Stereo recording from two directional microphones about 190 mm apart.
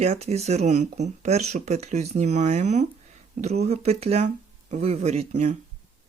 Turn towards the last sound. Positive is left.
turn(degrees=-35)  # may be behind; listen again after turning